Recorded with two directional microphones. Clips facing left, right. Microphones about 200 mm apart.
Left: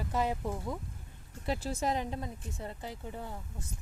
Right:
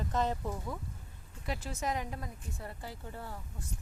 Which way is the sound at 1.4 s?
30° left (ahead or behind).